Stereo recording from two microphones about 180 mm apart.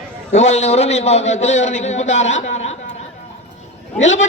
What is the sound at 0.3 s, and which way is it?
A man's voice, 40° left (ahead or behind).